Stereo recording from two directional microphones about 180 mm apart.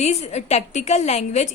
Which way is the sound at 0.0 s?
40° left (ahead or behind).